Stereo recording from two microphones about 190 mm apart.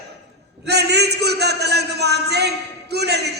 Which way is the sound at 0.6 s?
60° right (ahead or behind).